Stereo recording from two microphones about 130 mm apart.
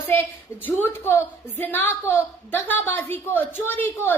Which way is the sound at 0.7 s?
15° left (ahead or behind).